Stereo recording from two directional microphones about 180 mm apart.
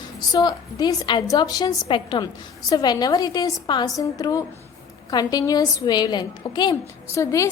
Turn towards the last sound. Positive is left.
turn(degrees=15)  # may be behind; listen again after turning